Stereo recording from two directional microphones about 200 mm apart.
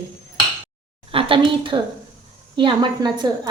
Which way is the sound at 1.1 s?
25° right (ahead or behind).